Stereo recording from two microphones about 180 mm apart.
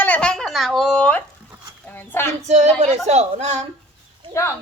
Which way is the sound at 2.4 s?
40° right (ahead or behind).